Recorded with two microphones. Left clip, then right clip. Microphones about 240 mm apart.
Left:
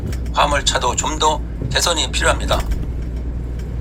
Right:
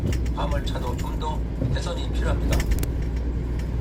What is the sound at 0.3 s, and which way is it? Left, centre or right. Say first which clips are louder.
Speech: left 17 dB; left.